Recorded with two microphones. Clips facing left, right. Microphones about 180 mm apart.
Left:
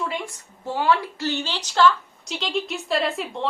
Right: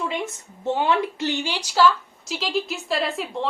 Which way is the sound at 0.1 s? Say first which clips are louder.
Right 2 dB; 20° right (ahead or behind).